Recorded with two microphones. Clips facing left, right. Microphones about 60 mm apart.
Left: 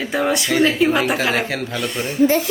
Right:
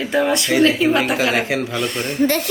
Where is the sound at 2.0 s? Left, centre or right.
Right.